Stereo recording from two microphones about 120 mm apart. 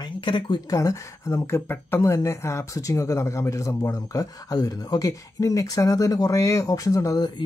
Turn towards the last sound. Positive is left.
turn(degrees=35)  # may be behind; listen again after turning